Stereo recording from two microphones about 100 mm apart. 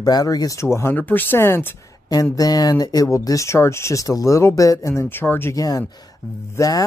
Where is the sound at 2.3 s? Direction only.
40° left (ahead or behind); by 5.6 s 20° left (ahead or behind).